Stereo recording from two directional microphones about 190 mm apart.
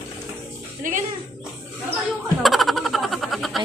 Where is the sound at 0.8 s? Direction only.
45° right (ahead or behind).